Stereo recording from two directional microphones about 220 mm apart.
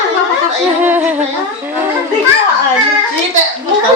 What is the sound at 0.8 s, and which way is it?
Music, 10° right (ahead or behind).